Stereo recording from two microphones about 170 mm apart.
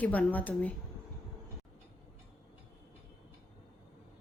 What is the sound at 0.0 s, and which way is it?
Speech, 10° left (ahead or behind).